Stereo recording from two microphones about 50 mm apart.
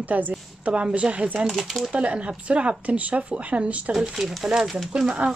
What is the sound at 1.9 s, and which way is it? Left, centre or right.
Speech, right.